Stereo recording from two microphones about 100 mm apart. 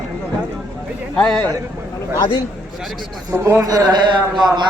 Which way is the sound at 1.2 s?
10° left (ahead or behind).